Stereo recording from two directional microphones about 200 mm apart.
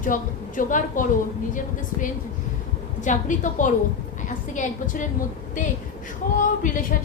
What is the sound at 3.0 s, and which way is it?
A woman's voice, 40° left (ahead or behind).